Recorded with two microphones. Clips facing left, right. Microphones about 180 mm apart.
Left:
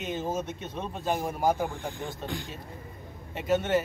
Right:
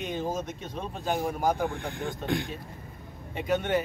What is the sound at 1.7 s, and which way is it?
Speech, 60° right (ahead or behind).